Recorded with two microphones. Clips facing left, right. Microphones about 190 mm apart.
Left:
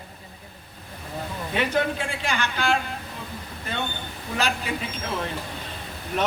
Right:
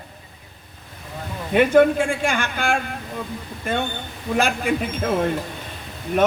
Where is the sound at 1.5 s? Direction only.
50° right (ahead or behind).